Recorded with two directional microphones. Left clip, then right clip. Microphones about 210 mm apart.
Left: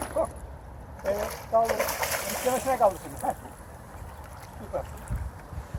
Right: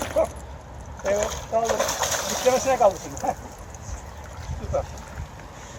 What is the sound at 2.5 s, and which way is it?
Speech, 45° right (ahead or behind).